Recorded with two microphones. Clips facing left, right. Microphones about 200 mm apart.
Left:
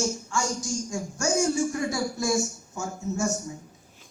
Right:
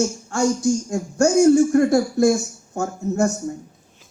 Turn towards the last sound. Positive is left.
turn(degrees=-60)  # may be behind; listen again after turning